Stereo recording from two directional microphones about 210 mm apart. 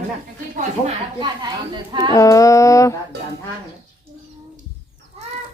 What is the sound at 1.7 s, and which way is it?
Speech, 20° right (ahead or behind).